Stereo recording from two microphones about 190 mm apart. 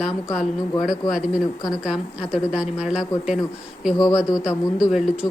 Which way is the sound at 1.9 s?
5° right (ahead or behind).